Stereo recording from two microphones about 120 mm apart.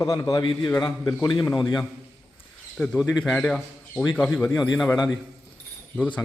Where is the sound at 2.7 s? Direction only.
10° left (ahead or behind).